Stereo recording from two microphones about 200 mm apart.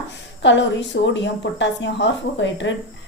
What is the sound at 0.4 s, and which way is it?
A woman's voice, 65° left (ahead or behind).